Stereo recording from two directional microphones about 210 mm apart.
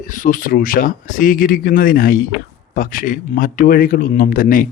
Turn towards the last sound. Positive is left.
turn(degrees=40)  # may be behind; listen again after turning